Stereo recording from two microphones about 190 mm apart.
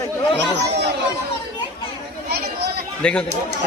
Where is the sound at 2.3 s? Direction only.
55° right (ahead or behind).